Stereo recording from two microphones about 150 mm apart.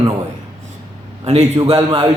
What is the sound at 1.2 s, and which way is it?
Speech, 45° right (ahead or behind).